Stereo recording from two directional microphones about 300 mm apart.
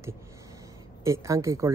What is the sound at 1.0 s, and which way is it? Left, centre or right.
Speech, centre.